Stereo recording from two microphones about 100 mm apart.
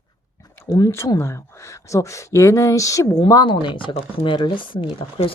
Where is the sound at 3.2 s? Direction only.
50° left (ahead or behind).